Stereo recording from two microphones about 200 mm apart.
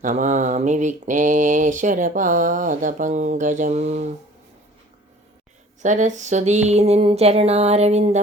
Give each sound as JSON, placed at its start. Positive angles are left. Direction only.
{"t": 0.0, "sound": "mantra", "side_deg": -40}
{"t": 5.8, "sound": "mantra", "side_deg": -35}